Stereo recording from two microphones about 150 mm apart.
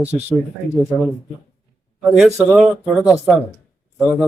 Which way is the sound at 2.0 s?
10° right (ahead or behind).